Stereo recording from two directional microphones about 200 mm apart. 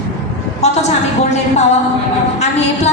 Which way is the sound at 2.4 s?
35° left (ahead or behind).